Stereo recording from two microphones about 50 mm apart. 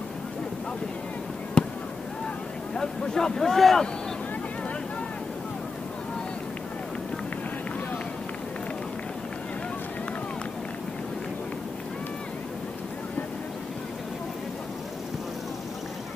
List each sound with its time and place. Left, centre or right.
1.6 s fireworks: centre
2.7 s speech: centre